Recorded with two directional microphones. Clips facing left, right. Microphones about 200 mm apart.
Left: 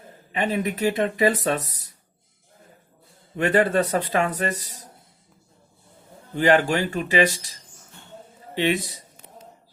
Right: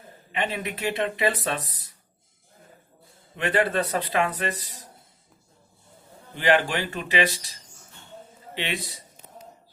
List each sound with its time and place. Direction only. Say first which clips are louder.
0.3 s a man's voice: left 5 dB; 45° left (ahead or behind)
3.3 s a man's voice: left 4 dB; 45° left (ahead or behind)
6.3 s a man's voice: left 4 dB; 45° left (ahead or behind)
8.5 s a man's voice: left 9 dB; 45° left (ahead or behind)